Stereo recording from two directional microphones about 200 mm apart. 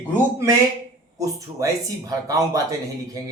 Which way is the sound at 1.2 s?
15° right (ahead or behind).